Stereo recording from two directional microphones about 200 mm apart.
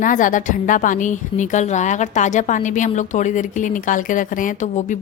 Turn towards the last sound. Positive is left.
turn(degrees=40)  # may be behind; listen again after turning